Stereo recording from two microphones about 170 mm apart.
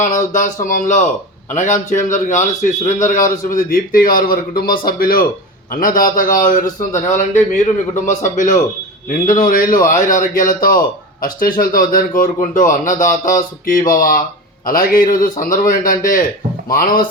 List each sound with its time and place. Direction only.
0.0 s a man's voice: 50° left (ahead or behind)